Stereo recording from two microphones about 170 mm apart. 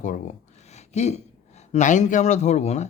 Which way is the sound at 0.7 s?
40° left (ahead or behind).